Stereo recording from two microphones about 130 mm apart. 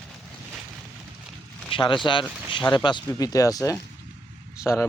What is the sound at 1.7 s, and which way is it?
Speech, 40° left (ahead or behind).